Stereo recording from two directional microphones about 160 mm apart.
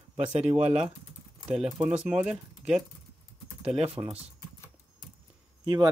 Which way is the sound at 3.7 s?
30° right (ahead or behind).